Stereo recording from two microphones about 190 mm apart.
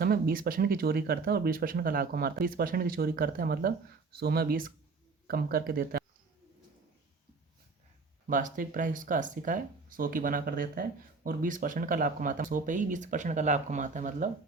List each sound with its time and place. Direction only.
0.0 s speech: 50° right (ahead or behind)
8.3 s speech: 45° right (ahead or behind)